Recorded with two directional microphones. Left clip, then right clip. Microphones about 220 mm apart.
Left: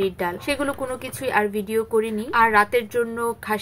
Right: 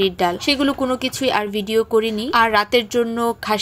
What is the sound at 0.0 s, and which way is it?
A woman's voice, 35° right (ahead or behind).